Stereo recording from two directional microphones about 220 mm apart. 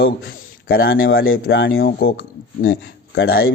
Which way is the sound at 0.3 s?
40° left (ahead or behind).